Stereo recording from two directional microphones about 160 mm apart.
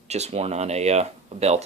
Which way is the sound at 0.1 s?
40° right (ahead or behind).